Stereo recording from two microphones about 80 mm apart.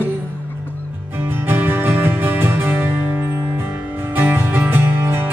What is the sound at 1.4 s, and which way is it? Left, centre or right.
Music, right.